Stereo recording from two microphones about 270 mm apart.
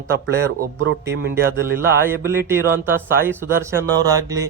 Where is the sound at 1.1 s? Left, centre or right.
Right.